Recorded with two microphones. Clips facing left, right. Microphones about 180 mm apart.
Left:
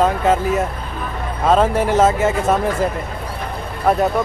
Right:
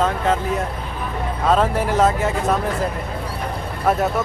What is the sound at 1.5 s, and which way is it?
Speech, centre (ahead or behind).